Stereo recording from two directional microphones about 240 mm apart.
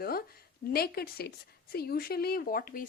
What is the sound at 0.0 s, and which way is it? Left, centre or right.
Speech, left.